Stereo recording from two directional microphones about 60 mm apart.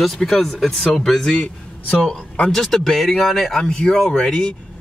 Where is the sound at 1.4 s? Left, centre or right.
Centre.